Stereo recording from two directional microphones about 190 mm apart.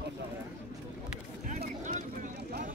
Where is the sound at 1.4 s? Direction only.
40° right (ahead or behind).